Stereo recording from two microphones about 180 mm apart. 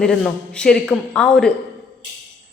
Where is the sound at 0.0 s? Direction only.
5° left (ahead or behind).